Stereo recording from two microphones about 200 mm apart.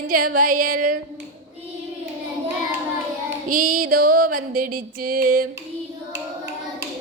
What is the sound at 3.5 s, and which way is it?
Music, 45° right (ahead or behind).